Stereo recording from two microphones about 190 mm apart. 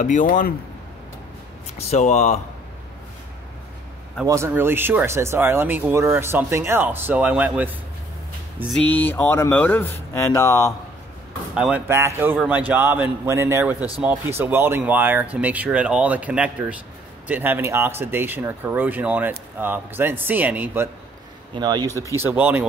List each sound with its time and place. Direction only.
0.0 s speech: 45° left (ahead or behind)
1.8 s speech: 35° left (ahead or behind)
4.3 s speech: 15° right (ahead or behind)
8.7 s speech: 10° left (ahead or behind)
11.5 s speech: 5° right (ahead or behind)
21.5 s speech: 20° right (ahead or behind)
21.8 s speech: 15° left (ahead or behind)
22.1 s speech: 10° right (ahead or behind)